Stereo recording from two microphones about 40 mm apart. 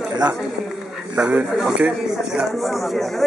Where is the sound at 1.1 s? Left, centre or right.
Right.